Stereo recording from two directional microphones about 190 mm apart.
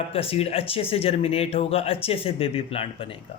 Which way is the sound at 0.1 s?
30° left (ahead or behind).